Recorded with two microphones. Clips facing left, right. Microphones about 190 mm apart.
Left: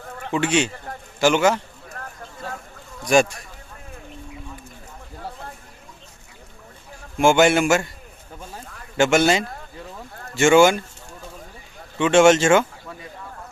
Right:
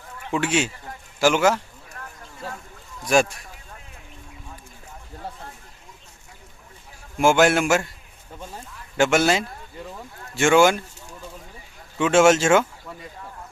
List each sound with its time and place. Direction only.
0.0 s a sound: 45° left (ahead or behind)
0.3 s speech: 5° right (ahead or behind)
7.2 s speech: centre (ahead or behind)
9.0 s speech: centre (ahead or behind)
11.9 s speech: 5° right (ahead or behind)